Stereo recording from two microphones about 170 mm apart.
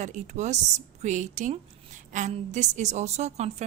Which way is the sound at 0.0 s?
45° right (ahead or behind).